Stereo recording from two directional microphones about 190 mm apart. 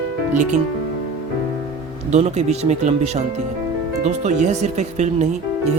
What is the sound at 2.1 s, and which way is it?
Speech, 35° right (ahead or behind).